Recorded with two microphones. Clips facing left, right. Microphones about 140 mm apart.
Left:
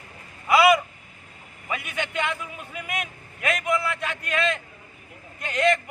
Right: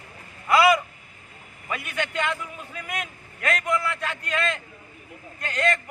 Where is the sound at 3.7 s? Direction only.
5° left (ahead or behind).